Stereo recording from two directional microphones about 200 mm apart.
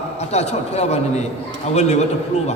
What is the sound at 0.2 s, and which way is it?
A man's voice, 35° left (ahead or behind).